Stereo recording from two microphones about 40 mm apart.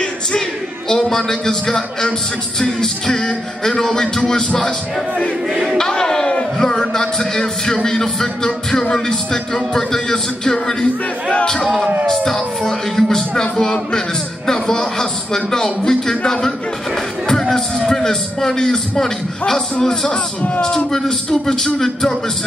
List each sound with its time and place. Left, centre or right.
0.8 s speech: centre
2.8 s music: centre
3.8 s speech: centre
5.8 s a man's voice: centre
8.9 s music: centre
12.1 s music: centre
16.3 s speech: centre
20.1 s a man's voice: left
20.6 s speech: centre